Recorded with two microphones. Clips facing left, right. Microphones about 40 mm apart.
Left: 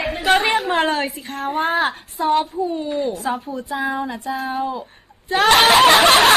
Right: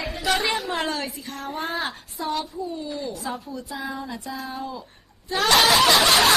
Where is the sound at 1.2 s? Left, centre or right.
Left.